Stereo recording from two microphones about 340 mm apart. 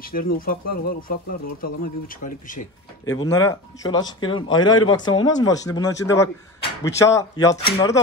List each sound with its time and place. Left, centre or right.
0.0 s speech: left
3.1 s speech: centre